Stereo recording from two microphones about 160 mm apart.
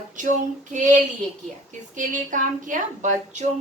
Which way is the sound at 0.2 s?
50° right (ahead or behind).